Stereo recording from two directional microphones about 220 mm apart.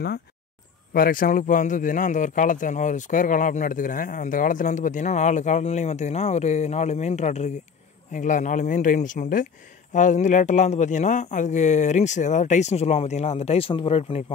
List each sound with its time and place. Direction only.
0.9 s a man's voice: 40° left (ahead or behind)